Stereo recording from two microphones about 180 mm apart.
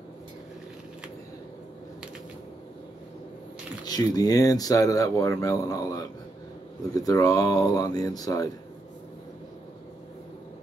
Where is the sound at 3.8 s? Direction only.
20° left (ahead or behind).